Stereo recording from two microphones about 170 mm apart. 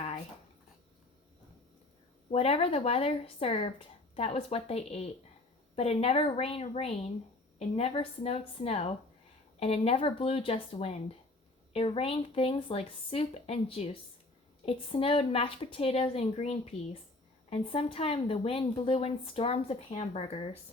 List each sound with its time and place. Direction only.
2.3 s a woman's voice: 35° left (ahead or behind)